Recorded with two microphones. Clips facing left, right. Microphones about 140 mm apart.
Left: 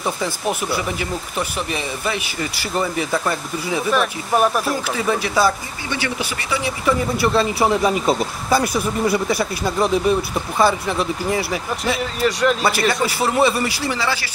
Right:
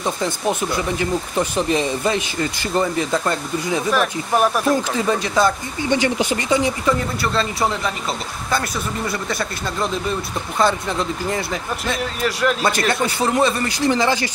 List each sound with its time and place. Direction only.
0.0 s speech: 5° left (ahead or behind)
2.7 s speech: 10° left (ahead or behind)
6.9 s speech: 5° left (ahead or behind)
7.6 s speech: 20° left (ahead or behind)
8.5 s speech: 5° left (ahead or behind)
13.9 s speech: 20° right (ahead or behind)